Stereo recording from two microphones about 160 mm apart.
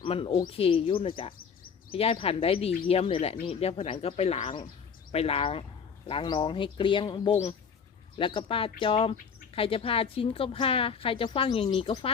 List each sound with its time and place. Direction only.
0.0 s a woman's voice: 35° left (ahead or behind)
8.2 s a woman's voice: 30° left (ahead or behind)